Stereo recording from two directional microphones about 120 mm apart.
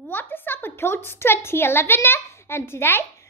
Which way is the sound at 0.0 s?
15° left (ahead or behind).